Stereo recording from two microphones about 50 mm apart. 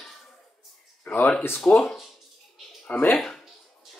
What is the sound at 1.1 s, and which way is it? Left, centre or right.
Speech, left.